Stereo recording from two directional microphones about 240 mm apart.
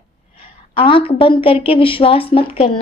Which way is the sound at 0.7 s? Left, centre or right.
Left.